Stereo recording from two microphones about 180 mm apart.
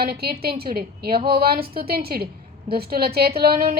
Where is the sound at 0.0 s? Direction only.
60° right (ahead or behind).